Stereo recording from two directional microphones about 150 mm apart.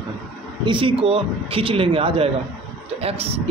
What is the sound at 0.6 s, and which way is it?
A man's voice, 35° right (ahead or behind).